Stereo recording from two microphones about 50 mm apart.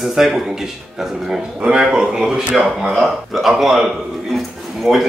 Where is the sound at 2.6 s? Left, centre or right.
Centre.